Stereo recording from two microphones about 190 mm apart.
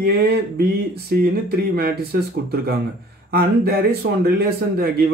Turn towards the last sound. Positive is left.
turn(degrees=-55)  # may be behind; listen again after turning